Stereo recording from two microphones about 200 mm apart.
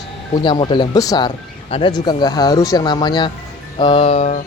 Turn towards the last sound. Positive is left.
turn(degrees=30)  # may be behind; listen again after turning